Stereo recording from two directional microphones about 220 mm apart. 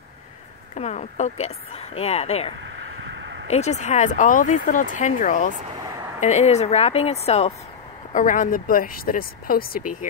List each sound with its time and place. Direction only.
0.7 s speech: 30° left (ahead or behind)
3.2 s a sound: 55° right (ahead or behind)
3.4 s speech: 30° left (ahead or behind)